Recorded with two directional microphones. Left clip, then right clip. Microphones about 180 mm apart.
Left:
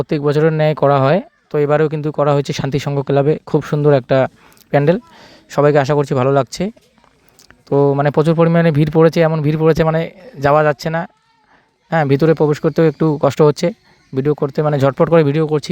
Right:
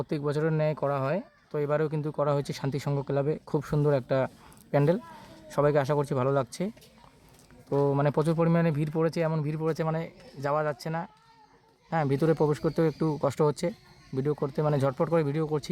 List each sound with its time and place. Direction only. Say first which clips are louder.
0.0 s speech: left 15 dB; 35° left (ahead or behind)